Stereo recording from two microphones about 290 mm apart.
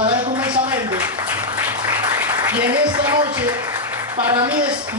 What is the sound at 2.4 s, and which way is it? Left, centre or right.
Speech, centre.